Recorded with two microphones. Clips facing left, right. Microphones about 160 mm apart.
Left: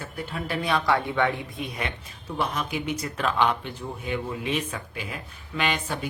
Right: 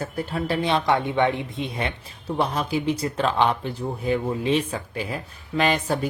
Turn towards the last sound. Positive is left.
turn(degrees=-40)  # may be behind; listen again after turning